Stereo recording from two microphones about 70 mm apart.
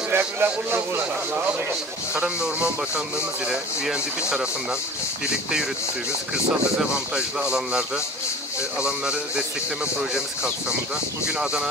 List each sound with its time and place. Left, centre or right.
0.1 s a man's voice: right
2.2 s a man's voice: centre
7.2 s a man's voice: centre
11.2 s a man's voice: centre